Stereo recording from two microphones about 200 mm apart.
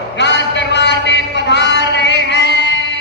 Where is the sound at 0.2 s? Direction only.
60° left (ahead or behind).